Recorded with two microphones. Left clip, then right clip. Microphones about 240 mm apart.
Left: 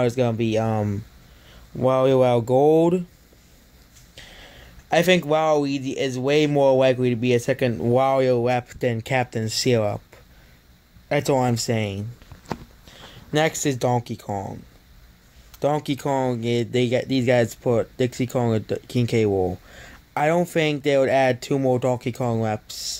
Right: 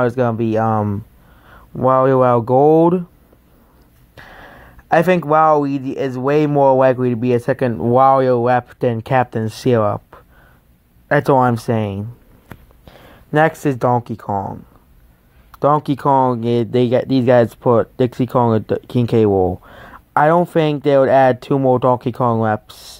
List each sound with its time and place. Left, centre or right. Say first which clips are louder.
0.0 s speech: right 5 dB; centre
4.1 s speech: right 6 dB; right
11.1 s speech: right 8 dB; right
15.5 s speech: right 8 dB; centre